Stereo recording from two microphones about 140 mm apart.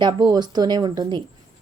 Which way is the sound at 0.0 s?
30° right (ahead or behind).